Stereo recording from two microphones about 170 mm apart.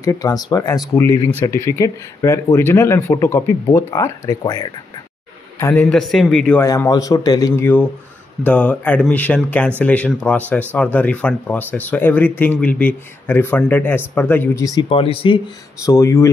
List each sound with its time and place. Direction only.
0.0 s speech: 20° left (ahead or behind)
5.9 s speech: centre (ahead or behind)
6.6 s speech: 20° left (ahead or behind)
15.8 s speech: 20° left (ahead or behind)